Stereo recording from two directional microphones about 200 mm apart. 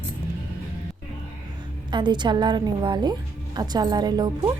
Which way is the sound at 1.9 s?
25° right (ahead or behind).